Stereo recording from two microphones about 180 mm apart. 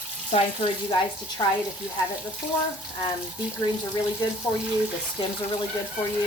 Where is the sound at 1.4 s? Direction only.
20° left (ahead or behind).